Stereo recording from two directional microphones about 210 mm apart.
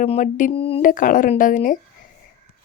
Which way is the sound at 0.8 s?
40° left (ahead or behind).